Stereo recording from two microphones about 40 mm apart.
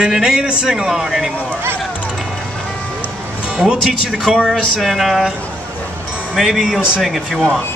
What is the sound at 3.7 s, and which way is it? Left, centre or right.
Speech, right.